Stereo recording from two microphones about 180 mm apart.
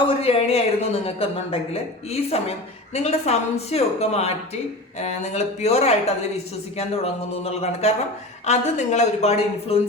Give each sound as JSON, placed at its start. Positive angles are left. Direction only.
{"t": 0.0, "sound": "speech", "side_deg": 30}
{"t": 7.6, "sound": "speech", "side_deg": 35}